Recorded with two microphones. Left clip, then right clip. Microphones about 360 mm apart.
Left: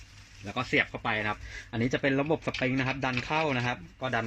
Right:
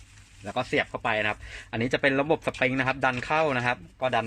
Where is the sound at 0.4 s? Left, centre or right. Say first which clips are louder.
Right 1 dB; right.